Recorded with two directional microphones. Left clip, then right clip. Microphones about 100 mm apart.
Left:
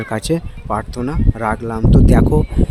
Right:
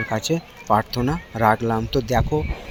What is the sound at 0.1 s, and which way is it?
Speech, 75° left (ahead or behind).